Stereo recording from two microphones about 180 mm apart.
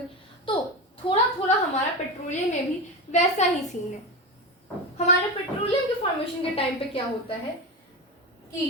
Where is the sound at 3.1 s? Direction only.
40° left (ahead or behind).